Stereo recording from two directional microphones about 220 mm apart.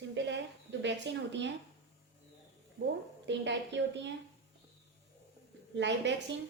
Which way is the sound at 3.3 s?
55° right (ahead or behind).